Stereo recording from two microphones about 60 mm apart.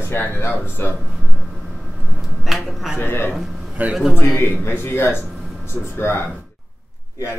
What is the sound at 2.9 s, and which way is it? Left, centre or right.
Speech, left.